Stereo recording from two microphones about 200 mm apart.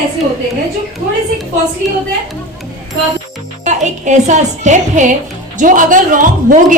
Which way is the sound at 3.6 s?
35° right (ahead or behind).